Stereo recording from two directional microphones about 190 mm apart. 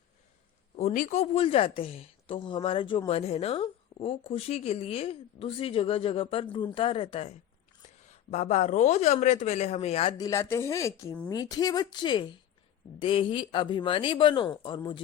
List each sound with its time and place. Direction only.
0.8 s a woman's voice: 40° left (ahead or behind)
10.2 s a woman's voice: 15° left (ahead or behind)